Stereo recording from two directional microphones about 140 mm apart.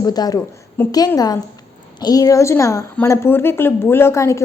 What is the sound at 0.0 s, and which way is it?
A woman's voice, 25° left (ahead or behind).